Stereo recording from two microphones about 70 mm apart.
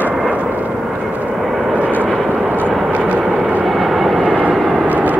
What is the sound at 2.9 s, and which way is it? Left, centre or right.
Vehicle, right.